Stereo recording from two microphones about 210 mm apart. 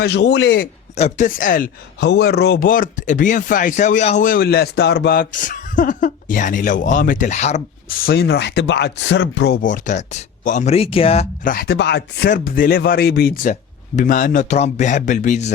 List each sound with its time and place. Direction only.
0.0 s chopping: 55° left (ahead or behind)
0.9 s speech: 35° left (ahead or behind); by 9.6 s 55° left (ahead or behind)
9.6 s speech: 35° left (ahead or behind)
11.5 s chopping: 50° left (ahead or behind)
12.3 s speech: 40° left (ahead or behind)